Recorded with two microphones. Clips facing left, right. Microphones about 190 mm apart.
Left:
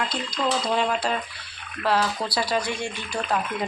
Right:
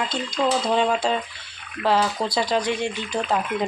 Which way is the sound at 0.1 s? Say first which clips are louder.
Right 3 dB; 25° right (ahead or behind).